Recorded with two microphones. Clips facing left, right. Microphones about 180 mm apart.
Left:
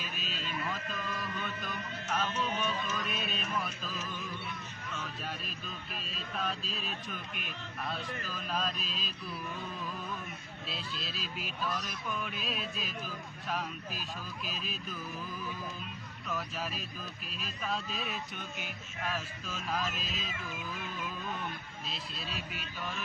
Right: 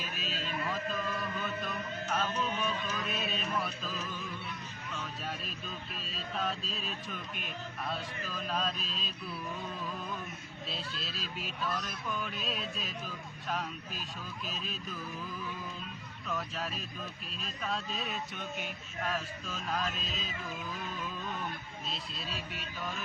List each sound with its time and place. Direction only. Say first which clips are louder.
0.0 s a sound: right 2 dB; centre (ahead or behind)
2.3 s speech: even; 35° right (ahead or behind)
3.6 s speech: right 1 dB; centre (ahead or behind)
10.7 s speech: even; centre (ahead or behind)
16.3 s speech: even; centre (ahead or behind)
21.8 s speech: right 1 dB; centre (ahead or behind)